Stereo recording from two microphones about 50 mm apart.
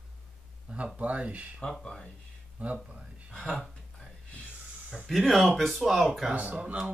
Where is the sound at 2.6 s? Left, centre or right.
Right.